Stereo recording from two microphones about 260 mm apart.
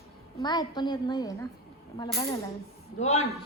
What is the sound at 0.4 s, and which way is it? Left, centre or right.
A woman's voice, centre.